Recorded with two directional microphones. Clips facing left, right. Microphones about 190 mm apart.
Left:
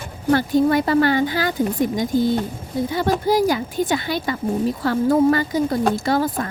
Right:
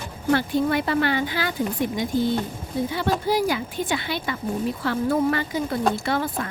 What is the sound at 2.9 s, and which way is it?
Speech, 40° left (ahead or behind).